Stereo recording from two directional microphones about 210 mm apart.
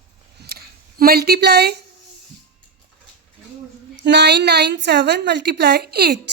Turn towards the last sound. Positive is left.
turn(degrees=-50)  # may be behind; listen again after turning